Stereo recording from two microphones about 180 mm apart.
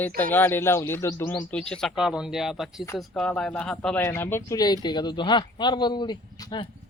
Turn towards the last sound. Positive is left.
turn(degrees=25)  # may be behind; listen again after turning